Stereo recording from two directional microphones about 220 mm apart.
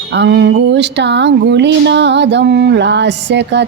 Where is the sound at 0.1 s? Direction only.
50° right (ahead or behind).